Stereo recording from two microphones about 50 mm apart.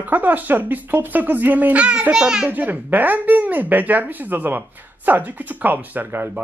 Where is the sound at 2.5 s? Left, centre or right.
Right.